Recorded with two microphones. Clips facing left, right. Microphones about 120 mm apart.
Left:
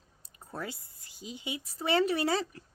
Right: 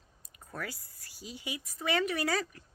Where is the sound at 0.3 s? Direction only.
25° left (ahead or behind).